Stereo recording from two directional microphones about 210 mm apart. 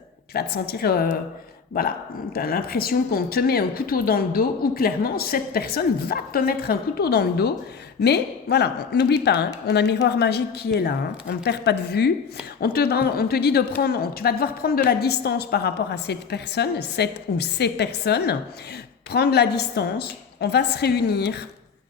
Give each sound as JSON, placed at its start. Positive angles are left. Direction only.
{"t": 0.3, "sound": "a woman's voice", "side_deg": 50}
{"t": 2.3, "sound": "a woman's voice", "side_deg": 45}